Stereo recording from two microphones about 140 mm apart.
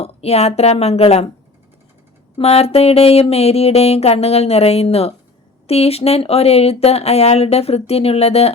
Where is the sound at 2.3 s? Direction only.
45° left (ahead or behind).